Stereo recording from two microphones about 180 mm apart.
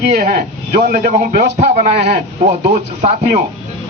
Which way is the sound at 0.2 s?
50° right (ahead or behind).